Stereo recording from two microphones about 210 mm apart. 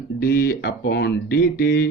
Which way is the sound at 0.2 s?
50° left (ahead or behind).